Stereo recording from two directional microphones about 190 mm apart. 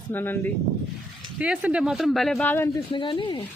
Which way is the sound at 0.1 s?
10° left (ahead or behind).